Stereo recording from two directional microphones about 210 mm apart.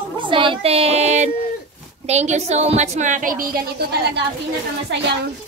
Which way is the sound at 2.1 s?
30° right (ahead or behind).